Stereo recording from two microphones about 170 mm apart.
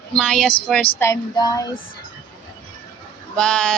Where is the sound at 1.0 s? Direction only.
20° left (ahead or behind).